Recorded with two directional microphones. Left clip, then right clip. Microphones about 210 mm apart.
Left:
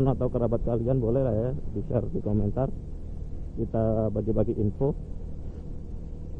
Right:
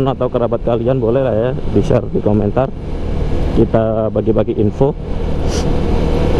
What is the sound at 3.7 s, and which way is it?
Speech, 15° right (ahead or behind).